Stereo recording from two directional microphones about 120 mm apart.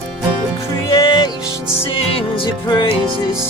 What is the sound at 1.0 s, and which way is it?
Music, 45° left (ahead or behind).